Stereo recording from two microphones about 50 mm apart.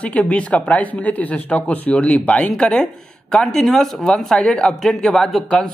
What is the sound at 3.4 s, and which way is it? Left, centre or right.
Speech, centre.